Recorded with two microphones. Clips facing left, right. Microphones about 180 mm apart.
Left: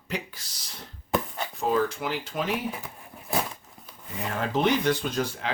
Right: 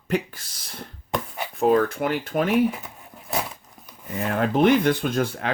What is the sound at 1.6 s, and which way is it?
Speech, 60° right (ahead or behind).